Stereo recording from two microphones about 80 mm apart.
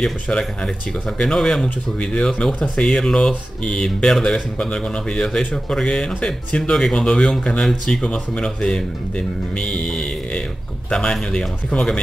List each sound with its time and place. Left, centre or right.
0.0 s speech: centre